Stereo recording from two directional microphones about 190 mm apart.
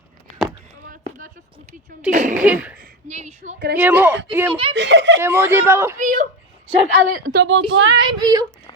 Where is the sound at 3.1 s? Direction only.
35° right (ahead or behind).